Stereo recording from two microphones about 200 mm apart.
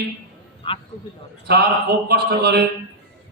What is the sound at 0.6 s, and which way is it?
Speech, 25° left (ahead or behind).